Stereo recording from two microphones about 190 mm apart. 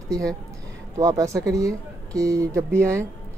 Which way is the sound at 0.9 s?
15° right (ahead or behind).